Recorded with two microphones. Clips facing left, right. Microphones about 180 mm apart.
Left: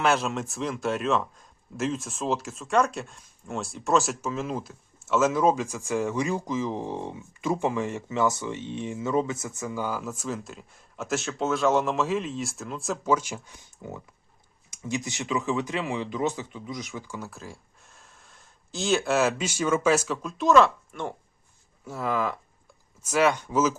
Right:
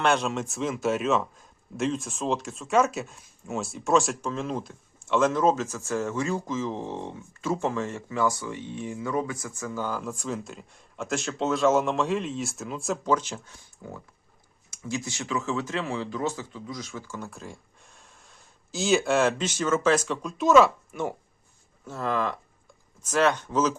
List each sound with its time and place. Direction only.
0.0 s speech: centre (ahead or behind)
17.2 s speech: centre (ahead or behind)
21.8 s speech: 10° left (ahead or behind)